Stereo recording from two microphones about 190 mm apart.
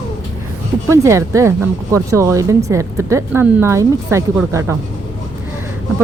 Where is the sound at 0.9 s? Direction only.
15° right (ahead or behind).